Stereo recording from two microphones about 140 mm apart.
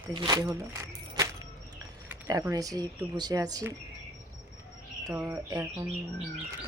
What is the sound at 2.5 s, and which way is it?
Speech, 25° right (ahead or behind).